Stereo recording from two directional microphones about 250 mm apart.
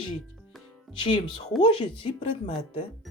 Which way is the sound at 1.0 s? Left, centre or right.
Left.